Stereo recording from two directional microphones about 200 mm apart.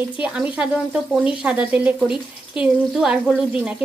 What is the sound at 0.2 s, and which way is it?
Speech, 5° right (ahead or behind).